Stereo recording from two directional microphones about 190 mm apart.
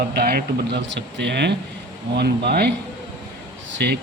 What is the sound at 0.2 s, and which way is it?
Speech, 55° right (ahead or behind).